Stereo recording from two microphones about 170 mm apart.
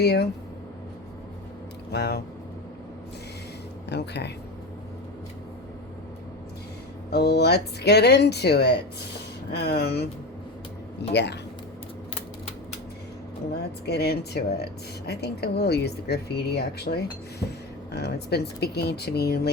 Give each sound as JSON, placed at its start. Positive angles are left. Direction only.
{"t": 0.0, "sound": "speech", "side_deg": 75}
{"t": 1.9, "sound": "speech", "side_deg": 70}
{"t": 3.8, "sound": "speech", "side_deg": 85}
{"t": 7.1, "sound": "speech", "side_deg": 70}
{"t": 11.1, "sound": "speech", "side_deg": 85}
{"t": 13.5, "sound": "speech", "side_deg": 70}